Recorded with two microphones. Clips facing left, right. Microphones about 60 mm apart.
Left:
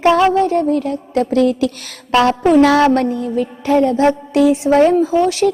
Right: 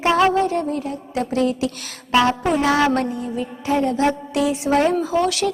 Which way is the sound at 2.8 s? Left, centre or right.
Left.